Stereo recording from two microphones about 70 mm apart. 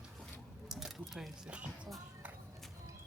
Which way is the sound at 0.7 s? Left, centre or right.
Centre.